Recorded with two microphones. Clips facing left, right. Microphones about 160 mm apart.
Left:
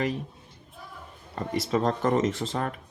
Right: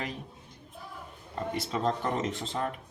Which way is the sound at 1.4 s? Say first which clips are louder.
Left 5 dB; 70° left (ahead or behind).